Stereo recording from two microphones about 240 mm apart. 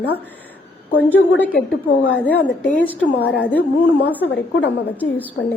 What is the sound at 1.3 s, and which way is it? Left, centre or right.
Speech, left.